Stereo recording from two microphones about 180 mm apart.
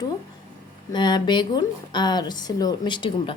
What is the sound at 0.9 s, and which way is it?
A woman's voice, 25° left (ahead or behind).